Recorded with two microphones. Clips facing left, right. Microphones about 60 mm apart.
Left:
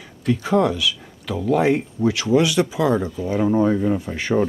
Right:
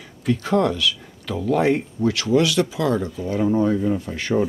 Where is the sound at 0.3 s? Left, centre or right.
Centre.